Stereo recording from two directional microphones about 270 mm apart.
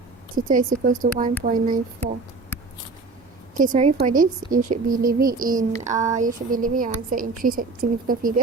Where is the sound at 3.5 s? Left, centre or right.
Right.